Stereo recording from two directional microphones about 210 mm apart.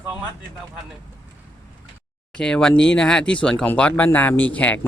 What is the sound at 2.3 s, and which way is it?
Speech, 5° left (ahead or behind).